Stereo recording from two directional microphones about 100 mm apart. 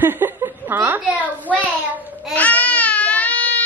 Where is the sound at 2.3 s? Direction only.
15° left (ahead or behind).